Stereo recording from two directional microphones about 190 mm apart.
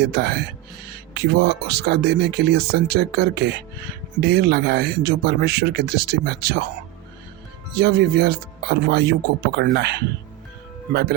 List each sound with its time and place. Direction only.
0.0 s speech: 55° right (ahead or behind)
7.8 s speech: 55° right (ahead or behind)